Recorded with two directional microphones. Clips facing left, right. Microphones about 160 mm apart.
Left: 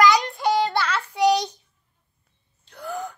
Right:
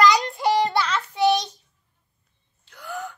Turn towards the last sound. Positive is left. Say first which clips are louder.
# left 2 dB
turn(degrees=35)  # may be behind; listen again after turning